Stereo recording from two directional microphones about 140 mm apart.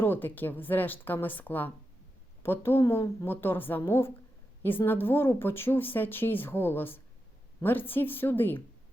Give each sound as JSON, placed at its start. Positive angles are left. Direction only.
{"t": 0.0, "sound": "speech", "side_deg": 15}